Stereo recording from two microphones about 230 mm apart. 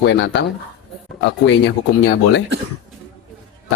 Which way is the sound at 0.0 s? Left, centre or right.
Left.